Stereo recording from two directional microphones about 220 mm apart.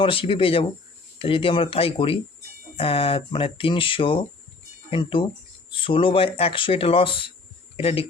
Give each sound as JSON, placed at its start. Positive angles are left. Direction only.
{"t": 0.0, "sound": "speech", "side_deg": 25}